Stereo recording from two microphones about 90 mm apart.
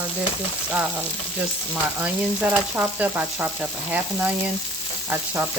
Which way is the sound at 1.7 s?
15° right (ahead or behind).